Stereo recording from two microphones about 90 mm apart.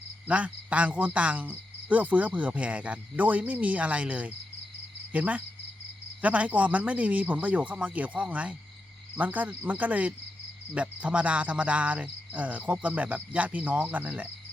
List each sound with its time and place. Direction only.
0.3 s cricket: 15° right (ahead or behind)